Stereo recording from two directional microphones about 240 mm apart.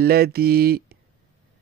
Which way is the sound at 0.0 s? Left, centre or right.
Right.